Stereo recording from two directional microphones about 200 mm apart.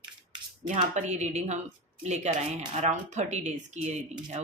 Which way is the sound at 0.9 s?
35° right (ahead or behind).